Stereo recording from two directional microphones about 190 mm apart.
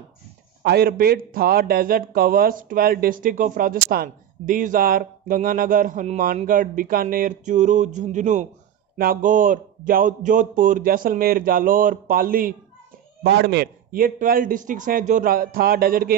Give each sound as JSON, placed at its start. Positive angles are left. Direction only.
{"t": 0.6, "sound": "a man's voice", "side_deg": -55}
{"t": 13.2, "sound": "a man's voice", "side_deg": -60}